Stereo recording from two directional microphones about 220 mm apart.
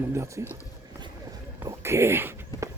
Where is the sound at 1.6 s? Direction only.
10° right (ahead or behind).